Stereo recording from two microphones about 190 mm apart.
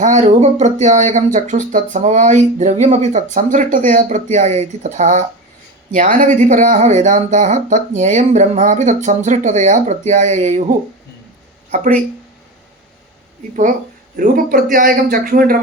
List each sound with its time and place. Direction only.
0.0 s speech: 40° right (ahead or behind)
14.2 s a man's voice: 45° right (ahead or behind)